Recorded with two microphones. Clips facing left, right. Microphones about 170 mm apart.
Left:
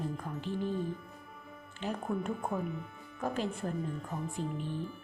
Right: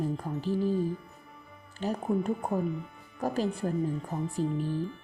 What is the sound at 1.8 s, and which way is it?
Speech, 40° right (ahead or behind).